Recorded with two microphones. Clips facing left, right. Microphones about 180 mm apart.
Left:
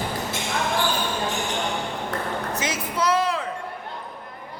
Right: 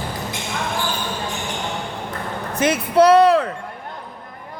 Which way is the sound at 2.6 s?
60° right (ahead or behind).